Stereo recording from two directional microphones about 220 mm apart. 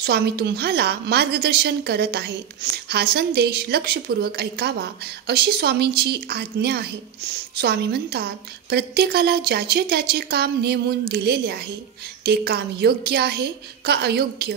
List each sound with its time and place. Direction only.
0.0 s a woman's voice: 45° right (ahead or behind)